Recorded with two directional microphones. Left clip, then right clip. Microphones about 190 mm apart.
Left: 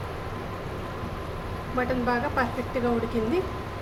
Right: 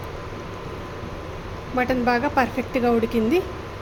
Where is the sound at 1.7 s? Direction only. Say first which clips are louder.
Right 5 dB; 45° right (ahead or behind).